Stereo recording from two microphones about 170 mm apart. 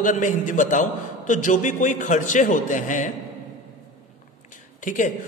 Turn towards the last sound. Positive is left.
turn(degrees=50)  # may be behind; listen again after turning